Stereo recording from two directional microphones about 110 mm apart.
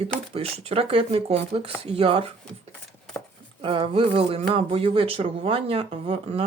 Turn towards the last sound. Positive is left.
turn(degrees=-60)  # may be behind; listen again after turning